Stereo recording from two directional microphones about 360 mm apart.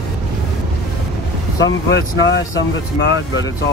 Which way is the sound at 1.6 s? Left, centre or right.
Left.